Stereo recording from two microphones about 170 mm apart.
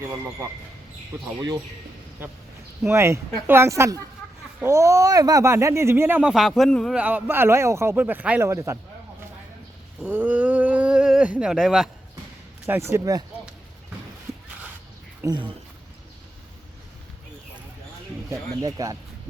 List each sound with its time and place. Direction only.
2.8 s speech: 15° right (ahead or behind); by 6.9 s 5° left (ahead or behind)
6.9 s speech: 10° right (ahead or behind)
10.0 s a sound: 10° right (ahead or behind)
12.6 s speech: 15° right (ahead or behind)
15.3 s speech: 30° right (ahead or behind)
18.3 s speech: 20° right (ahead or behind)